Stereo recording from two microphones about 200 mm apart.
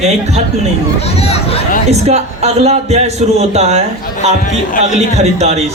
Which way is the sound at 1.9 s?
30° right (ahead or behind).